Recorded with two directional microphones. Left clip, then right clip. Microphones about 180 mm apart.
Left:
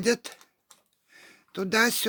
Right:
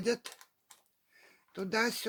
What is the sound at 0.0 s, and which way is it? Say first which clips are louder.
Speech: left 7 dB; 60° left (ahead or behind).